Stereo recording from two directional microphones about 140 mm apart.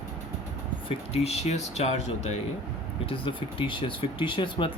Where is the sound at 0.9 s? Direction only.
45° left (ahead or behind).